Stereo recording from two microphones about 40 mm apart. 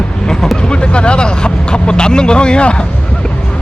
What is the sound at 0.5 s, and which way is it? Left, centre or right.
Vehicle, left.